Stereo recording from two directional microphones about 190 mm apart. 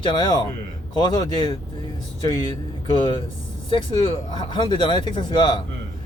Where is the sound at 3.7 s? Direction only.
25° left (ahead or behind).